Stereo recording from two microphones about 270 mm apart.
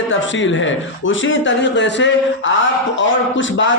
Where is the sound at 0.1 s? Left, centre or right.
Left.